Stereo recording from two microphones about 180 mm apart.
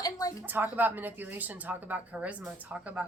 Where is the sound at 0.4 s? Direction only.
10° right (ahead or behind).